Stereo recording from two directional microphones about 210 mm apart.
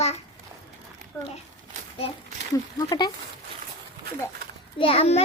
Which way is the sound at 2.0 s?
30° left (ahead or behind).